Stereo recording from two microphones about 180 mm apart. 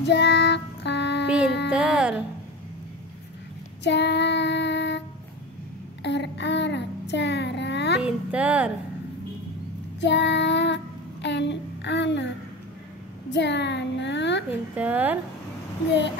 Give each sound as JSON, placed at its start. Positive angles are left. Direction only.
{"t": 0.0, "sound": "child singing", "side_deg": 75}
{"t": 1.7, "sound": "music", "side_deg": -5}
{"t": 3.8, "sound": "child singing", "side_deg": 70}
{"t": 6.0, "sound": "child singing", "side_deg": 75}
{"t": 8.0, "sound": "a sound", "side_deg": -5}
{"t": 9.9, "sound": "child singing", "side_deg": 80}
{"t": 11.2, "sound": "a sound", "side_deg": 75}
{"t": 13.3, "sound": "a sound", "side_deg": 75}
{"t": 14.8, "sound": "speech", "side_deg": -10}